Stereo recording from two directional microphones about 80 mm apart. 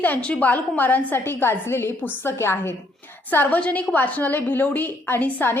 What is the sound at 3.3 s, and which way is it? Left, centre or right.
A woman's voice, left.